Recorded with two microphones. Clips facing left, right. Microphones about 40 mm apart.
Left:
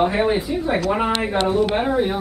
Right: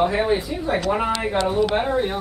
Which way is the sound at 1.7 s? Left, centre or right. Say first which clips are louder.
Left 2 dB; centre.